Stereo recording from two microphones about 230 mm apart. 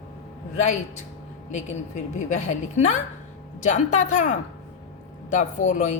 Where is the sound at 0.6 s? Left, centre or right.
Left.